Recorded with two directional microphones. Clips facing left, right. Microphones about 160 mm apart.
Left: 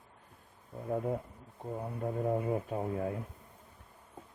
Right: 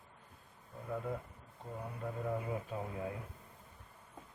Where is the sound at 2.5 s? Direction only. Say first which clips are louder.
Left 7 dB; 45° left (ahead or behind).